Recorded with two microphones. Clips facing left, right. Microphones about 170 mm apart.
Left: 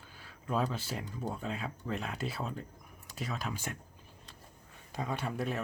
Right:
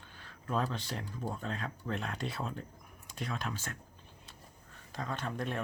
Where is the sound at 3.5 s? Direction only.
15° left (ahead or behind).